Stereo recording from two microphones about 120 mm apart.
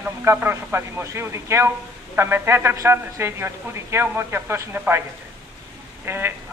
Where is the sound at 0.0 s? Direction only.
20° right (ahead or behind).